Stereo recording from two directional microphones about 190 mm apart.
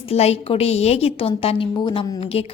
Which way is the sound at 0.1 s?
30° left (ahead or behind).